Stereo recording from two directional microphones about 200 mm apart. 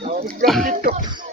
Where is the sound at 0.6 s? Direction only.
40° right (ahead or behind).